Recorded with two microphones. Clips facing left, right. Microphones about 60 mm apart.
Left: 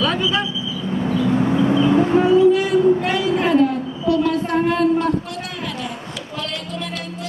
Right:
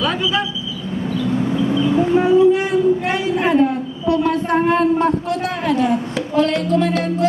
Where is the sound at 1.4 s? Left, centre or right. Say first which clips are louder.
Left 1 dB; left.